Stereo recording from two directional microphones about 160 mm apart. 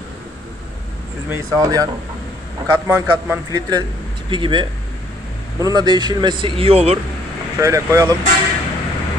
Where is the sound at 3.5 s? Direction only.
25° right (ahead or behind).